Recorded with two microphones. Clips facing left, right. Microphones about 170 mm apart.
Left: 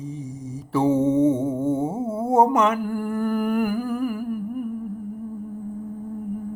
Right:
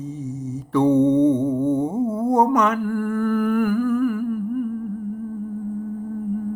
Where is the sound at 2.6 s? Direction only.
10° left (ahead or behind).